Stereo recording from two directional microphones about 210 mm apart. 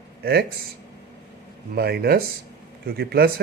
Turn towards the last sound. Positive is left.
turn(degrees=-50)  # may be behind; listen again after turning